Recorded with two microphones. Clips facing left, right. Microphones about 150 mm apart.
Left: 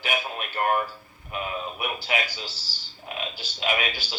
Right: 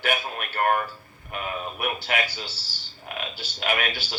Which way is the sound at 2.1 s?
55° right (ahead or behind).